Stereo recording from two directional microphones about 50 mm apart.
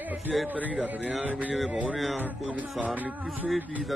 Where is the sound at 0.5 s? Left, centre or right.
Right.